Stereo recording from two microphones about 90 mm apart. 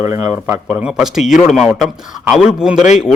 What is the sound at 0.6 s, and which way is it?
A man's voice, 5° right (ahead or behind).